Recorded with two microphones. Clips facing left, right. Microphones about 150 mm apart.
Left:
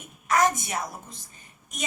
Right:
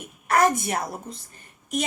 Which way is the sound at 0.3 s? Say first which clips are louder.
Right 3 dB; 60° right (ahead or behind).